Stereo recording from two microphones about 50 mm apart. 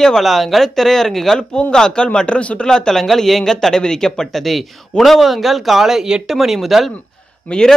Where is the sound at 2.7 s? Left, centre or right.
Centre.